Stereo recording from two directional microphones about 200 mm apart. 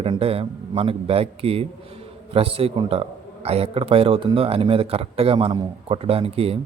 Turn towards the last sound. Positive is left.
turn(degrees=-30)  # may be behind; listen again after turning